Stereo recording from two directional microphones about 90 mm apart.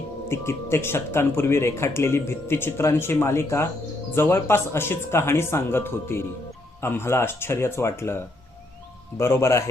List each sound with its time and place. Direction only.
0.3 s a man's voice: 30° left (ahead or behind)